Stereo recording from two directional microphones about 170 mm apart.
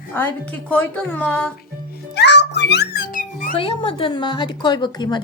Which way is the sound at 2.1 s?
90° left.